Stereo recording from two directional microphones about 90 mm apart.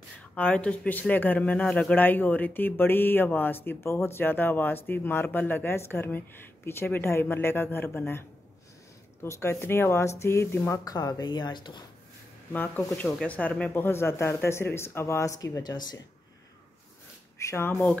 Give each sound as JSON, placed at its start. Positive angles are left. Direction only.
{"t": 0.3, "sound": "speech", "side_deg": 15}
{"t": 7.8, "sound": "speech", "side_deg": 10}
{"t": 9.2, "sound": "speech", "side_deg": 30}
{"t": 10.8, "sound": "speech", "side_deg": 45}
{"t": 12.5, "sound": "speech", "side_deg": 20}
{"t": 17.4, "sound": "speech", "side_deg": 30}